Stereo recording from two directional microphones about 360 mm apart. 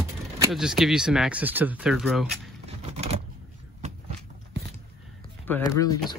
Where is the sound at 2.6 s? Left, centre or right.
Centre.